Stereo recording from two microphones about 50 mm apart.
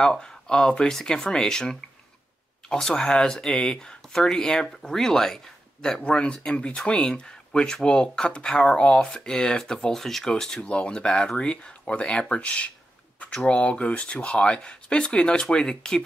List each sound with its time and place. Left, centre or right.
0.0 s speech: centre
10.3 s speech: centre